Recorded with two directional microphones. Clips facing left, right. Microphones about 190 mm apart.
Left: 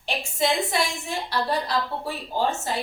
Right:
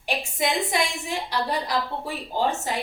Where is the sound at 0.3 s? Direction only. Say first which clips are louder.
Left 1 dB; 15° right (ahead or behind).